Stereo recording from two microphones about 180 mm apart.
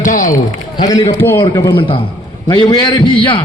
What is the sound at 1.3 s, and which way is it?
A man's voice, 25° left (ahead or behind).